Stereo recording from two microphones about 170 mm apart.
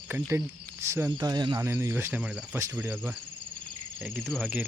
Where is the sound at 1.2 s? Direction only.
25° right (ahead or behind).